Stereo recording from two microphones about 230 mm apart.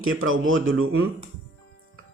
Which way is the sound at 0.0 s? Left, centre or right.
Right.